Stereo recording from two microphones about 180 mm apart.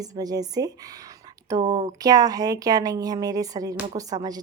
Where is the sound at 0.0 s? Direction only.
20° right (ahead or behind).